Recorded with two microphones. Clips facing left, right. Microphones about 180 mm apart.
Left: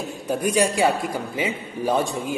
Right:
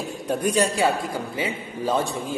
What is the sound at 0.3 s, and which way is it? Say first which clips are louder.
A man's voice: left 1 dB; 10° left (ahead or behind).